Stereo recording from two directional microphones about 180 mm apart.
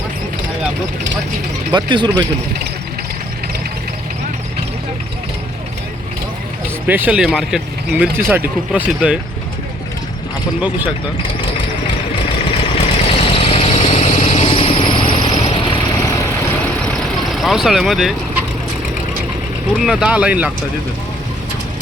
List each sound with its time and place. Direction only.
1.7 s speech: 25° right (ahead or behind)
6.8 s speech: 10° right (ahead or behind)
12.7 s vehicle: 35° left (ahead or behind); by 16.6 s 15° left (ahead or behind)
16.8 s vehicle: 5° left (ahead or behind)
19.7 s speech: 5° right (ahead or behind)